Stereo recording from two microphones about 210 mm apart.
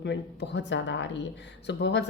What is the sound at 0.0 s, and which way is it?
A woman's voice, 55° left (ahead or behind).